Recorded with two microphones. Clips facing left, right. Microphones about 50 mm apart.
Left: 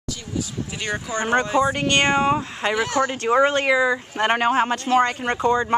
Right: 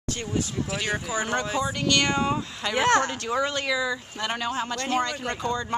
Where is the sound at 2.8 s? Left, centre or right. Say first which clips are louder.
Right 2 dB; right.